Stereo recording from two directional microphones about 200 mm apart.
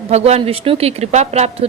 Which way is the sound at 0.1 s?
30° right (ahead or behind).